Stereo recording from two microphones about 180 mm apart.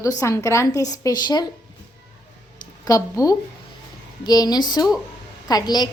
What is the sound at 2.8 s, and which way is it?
A woman's voice, 20° left (ahead or behind).